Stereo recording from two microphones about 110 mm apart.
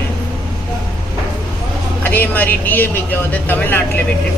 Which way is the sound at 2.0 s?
15° left (ahead or behind).